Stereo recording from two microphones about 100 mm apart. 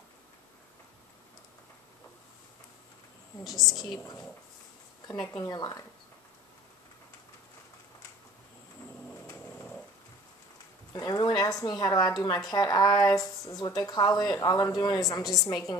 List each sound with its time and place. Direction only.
3.4 s a woman's voice: centre (ahead or behind)
5.2 s speech: 40° left (ahead or behind)
10.9 s a sound: 40° left (ahead or behind)
11.6 s speech: 40° left (ahead or behind)